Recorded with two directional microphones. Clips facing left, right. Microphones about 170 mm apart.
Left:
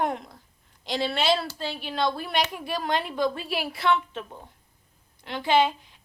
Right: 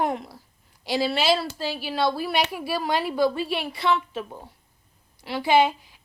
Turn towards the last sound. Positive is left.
turn(degrees=-10)  # may be behind; listen again after turning